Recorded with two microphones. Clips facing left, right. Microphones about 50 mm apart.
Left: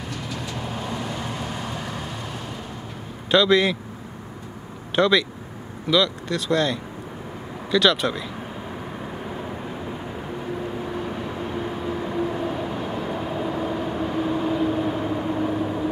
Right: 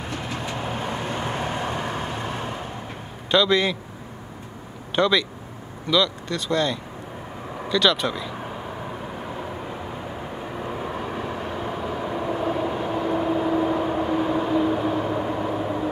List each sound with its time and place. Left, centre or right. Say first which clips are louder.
0.1 s vehicle: right 2 dB; right
3.3 s speech: left 2 dB; centre
4.9 s speech: left 1 dB; centre
10.8 s vehicle: even; centre
11.6 s vehicle: even; centre